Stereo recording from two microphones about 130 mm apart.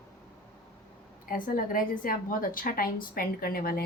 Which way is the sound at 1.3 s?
90° left.